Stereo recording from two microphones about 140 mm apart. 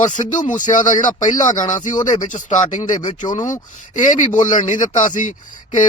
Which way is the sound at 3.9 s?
60° left (ahead or behind).